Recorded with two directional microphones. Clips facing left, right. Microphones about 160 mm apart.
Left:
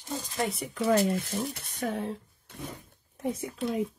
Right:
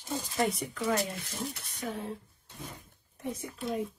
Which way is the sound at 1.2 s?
50° left (ahead or behind).